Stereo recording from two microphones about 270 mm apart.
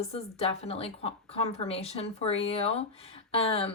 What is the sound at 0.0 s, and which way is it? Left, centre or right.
Speech, left.